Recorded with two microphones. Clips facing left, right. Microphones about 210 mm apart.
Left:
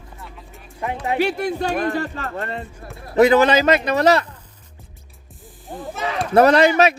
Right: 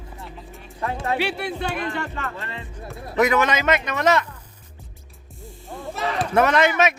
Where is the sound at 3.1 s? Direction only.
30° left (ahead or behind).